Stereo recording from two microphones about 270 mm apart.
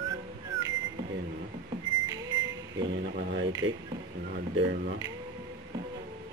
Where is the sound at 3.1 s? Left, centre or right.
Right.